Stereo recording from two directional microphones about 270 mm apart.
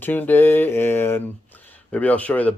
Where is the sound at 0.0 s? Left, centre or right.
Centre.